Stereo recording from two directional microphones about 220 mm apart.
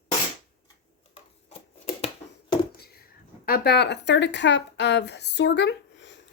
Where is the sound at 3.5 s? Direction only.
50° left (ahead or behind).